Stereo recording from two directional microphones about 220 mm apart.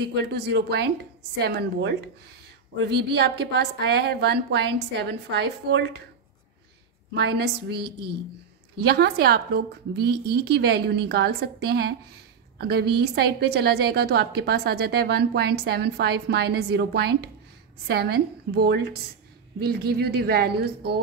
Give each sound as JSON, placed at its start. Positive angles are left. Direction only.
{"t": 0.0, "sound": "a woman's voice", "side_deg": -50}
{"t": 7.2, "sound": "a woman's voice", "side_deg": -50}